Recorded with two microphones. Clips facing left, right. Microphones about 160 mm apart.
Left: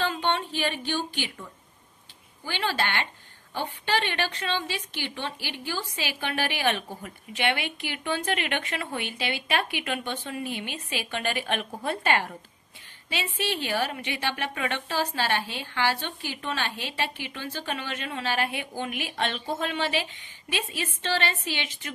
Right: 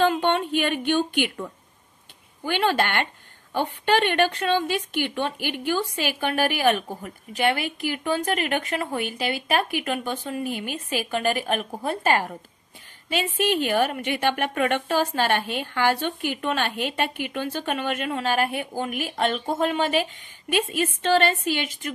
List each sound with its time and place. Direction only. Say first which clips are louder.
0.0 s speech: right 6 dB; 55° right (ahead or behind)
2.4 s a woman's voice: right 6 dB; 55° right (ahead or behind)